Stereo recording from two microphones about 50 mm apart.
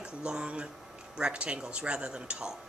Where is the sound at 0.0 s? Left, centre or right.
Centre.